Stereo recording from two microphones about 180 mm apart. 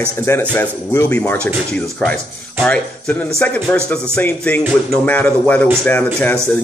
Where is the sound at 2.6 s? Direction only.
5° left (ahead or behind).